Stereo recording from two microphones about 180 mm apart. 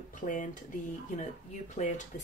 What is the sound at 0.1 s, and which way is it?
A woman's voice, 45° left (ahead or behind).